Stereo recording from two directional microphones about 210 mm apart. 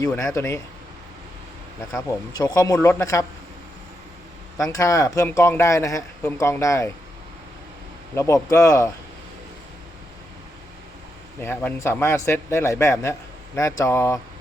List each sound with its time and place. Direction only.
0.1 s speech: 10° left (ahead or behind)
2.4 s speech: 15° left (ahead or behind)
4.5 s speech: 15° left (ahead or behind)
8.1 s speech: 15° left (ahead or behind)
11.4 s speech: 10° left (ahead or behind)